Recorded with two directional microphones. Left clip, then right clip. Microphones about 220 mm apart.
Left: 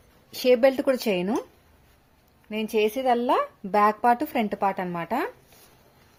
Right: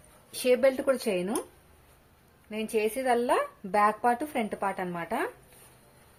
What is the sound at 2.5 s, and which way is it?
Speech, 40° left (ahead or behind).